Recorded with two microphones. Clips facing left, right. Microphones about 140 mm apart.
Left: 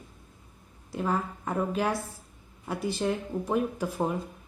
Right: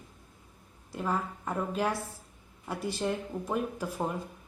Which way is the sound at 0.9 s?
5° left (ahead or behind).